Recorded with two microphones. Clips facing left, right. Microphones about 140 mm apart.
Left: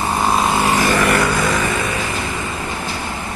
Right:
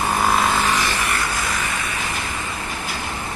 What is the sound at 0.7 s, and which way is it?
Vehicle, 45° left (ahead or behind).